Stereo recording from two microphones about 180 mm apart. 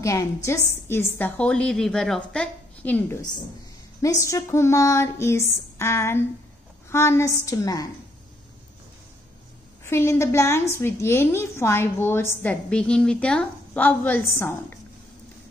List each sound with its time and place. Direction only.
0.0 s a woman's voice: 15° left (ahead or behind)
9.8 s a woman's voice: 15° left (ahead or behind)